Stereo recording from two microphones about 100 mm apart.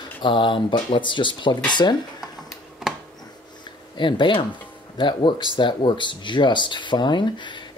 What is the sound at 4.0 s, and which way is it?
Speech, 55° left (ahead or behind).